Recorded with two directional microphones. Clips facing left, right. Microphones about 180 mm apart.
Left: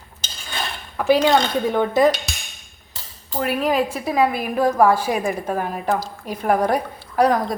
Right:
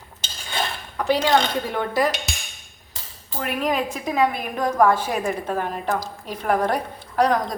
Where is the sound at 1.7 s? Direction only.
25° left (ahead or behind).